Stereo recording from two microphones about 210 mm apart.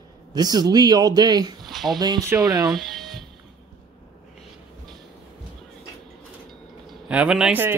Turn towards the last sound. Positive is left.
turn(degrees=-5)  # may be behind; listen again after turning